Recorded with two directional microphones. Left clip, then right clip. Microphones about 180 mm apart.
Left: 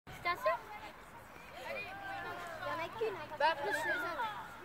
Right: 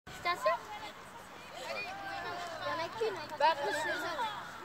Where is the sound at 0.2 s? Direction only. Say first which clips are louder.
Right 3 dB; 10° right (ahead or behind).